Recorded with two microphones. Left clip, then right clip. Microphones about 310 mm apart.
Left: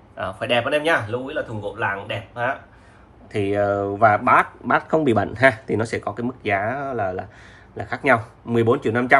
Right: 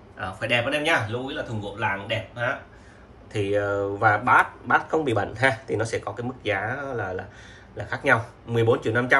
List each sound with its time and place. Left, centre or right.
0.2 s speech: centre
3.3 s speech: centre